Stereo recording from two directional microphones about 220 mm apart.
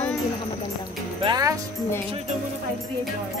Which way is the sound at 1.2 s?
15° right (ahead or behind).